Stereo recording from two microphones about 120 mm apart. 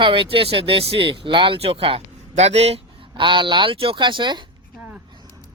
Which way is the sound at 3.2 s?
40° right (ahead or behind).